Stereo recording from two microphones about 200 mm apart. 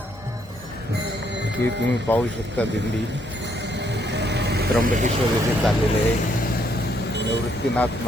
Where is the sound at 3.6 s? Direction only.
60° right (ahead or behind).